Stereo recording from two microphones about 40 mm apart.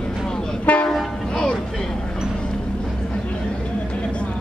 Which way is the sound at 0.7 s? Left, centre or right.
Left.